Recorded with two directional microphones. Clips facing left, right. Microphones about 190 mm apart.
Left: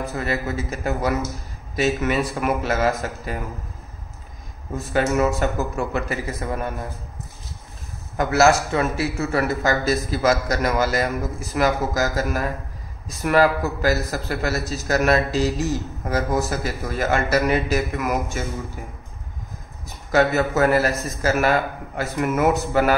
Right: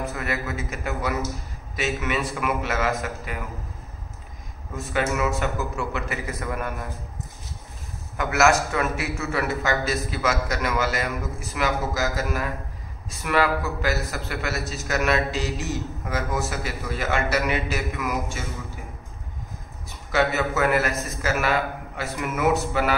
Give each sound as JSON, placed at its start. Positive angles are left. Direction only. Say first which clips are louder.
{"t": 0.1, "sound": "a man's voice", "louder": "left 4 dB", "side_deg": 30}
{"t": 4.9, "sound": "a man's voice", "louder": "left 5 dB", "side_deg": 40}
{"t": 6.4, "sound": "a man's voice", "louder": "left 2 dB", "side_deg": 30}
{"t": 8.2, "sound": "a man's voice", "louder": "left 3 dB", "side_deg": 35}
{"t": 20.1, "sound": "a man's voice", "louder": "left 4 dB", "side_deg": 40}